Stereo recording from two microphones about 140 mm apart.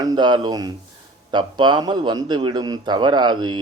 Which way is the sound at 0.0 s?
30° right (ahead or behind).